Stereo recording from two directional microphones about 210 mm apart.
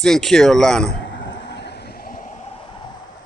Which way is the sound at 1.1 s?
60° left (ahead or behind).